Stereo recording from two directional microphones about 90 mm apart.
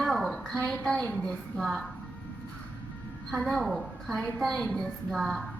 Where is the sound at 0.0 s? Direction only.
Centre (ahead or behind).